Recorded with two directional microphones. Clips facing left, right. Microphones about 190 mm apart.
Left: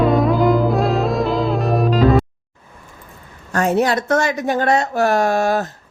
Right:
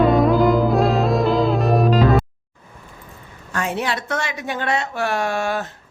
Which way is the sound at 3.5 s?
40° left (ahead or behind).